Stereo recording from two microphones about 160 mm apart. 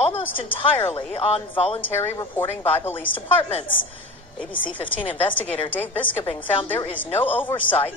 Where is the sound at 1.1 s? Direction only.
35° left (ahead or behind).